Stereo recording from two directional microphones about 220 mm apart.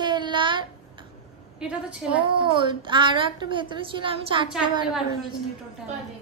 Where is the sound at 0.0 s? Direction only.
20° right (ahead or behind).